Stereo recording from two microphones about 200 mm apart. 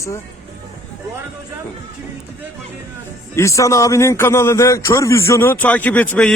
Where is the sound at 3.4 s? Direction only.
15° left (ahead or behind).